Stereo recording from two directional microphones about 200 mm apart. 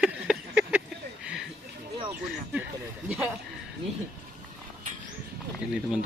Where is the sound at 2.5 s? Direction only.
10° right (ahead or behind).